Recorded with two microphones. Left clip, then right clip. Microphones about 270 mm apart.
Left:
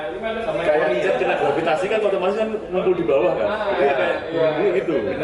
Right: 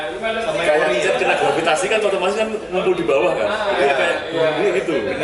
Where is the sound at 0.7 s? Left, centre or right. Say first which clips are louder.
Right 2 dB; centre.